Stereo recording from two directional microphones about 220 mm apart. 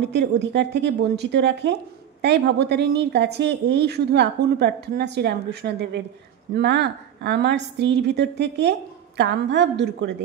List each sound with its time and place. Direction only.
0.0 s speech: 50° right (ahead or behind)